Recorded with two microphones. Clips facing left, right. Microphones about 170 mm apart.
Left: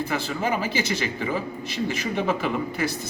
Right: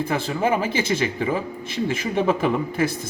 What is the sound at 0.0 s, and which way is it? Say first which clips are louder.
A man's voice: right 4 dB; 50° right (ahead or behind).